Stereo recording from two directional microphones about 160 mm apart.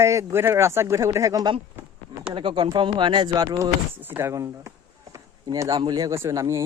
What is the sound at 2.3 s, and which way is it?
Speech, 35° right (ahead or behind).